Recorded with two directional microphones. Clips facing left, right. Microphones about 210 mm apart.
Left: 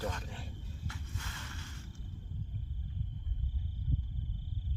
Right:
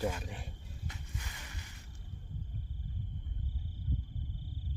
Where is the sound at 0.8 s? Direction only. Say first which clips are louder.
Even; 15° right (ahead or behind).